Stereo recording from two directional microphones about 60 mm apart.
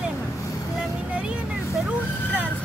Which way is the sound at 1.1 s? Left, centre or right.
Centre.